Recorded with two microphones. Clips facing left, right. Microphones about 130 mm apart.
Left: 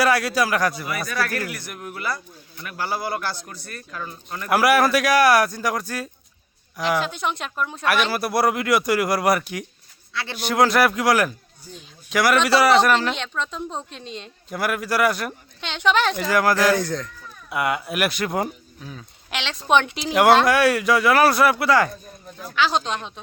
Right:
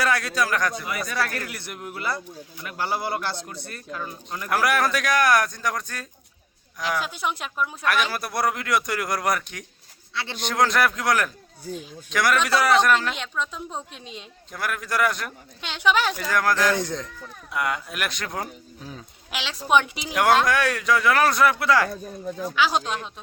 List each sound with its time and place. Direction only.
0.0 s a man's voice: 5° left (ahead or behind)
0.9 s speech: 20° right (ahead or behind)
4.4 s a man's voice: 10° left (ahead or behind)
7.0 s a man's voice: 5° right (ahead or behind)
14.5 s a man's voice: 5° left (ahead or behind)
15.6 s a man's voice: 5° right (ahead or behind)
16.1 s a man's voice: 5° left (ahead or behind)
16.7 s speech: 20° right (ahead or behind)
17.5 s a man's voice: 5° left (ahead or behind)
18.8 s speech: 30° right (ahead or behind)
19.3 s a man's voice: 5° right (ahead or behind)
20.5 s a man's voice: 5° left (ahead or behind)
22.5 s a man's voice: 10° right (ahead or behind)